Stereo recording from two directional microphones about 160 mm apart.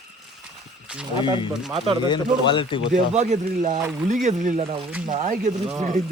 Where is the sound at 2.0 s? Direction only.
30° left (ahead or behind).